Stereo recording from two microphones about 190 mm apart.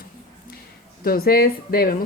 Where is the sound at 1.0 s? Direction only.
50° left (ahead or behind).